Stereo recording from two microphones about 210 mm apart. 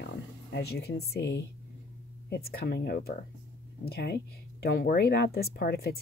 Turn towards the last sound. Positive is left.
turn(degrees=45)  # may be behind; listen again after turning